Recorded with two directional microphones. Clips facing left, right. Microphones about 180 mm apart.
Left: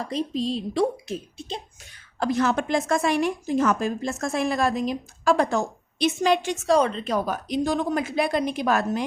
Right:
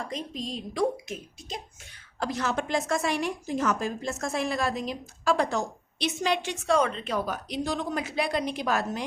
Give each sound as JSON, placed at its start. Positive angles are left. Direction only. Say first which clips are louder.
{"t": 0.0, "sound": "a woman's voice", "louder": "left 8 dB", "side_deg": 35}
{"t": 2.2, "sound": "a woman's voice", "louder": "left 6 dB", "side_deg": 55}